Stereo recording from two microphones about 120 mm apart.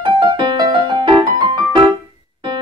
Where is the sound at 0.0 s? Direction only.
40° right (ahead or behind).